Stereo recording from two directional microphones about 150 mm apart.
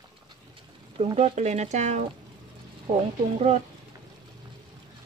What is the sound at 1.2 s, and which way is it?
Speech, 50° right (ahead or behind).